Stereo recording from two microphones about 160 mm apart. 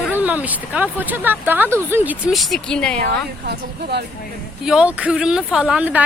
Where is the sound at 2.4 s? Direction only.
5° left (ahead or behind).